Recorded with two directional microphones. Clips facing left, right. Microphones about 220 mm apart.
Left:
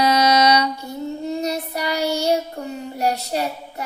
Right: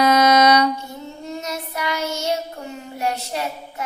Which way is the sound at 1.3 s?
35° left (ahead or behind).